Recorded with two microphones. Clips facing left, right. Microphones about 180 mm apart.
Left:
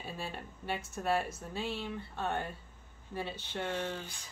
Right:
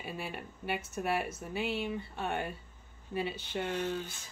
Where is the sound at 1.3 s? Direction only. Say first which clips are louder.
Right 3 dB; 65° right (ahead or behind).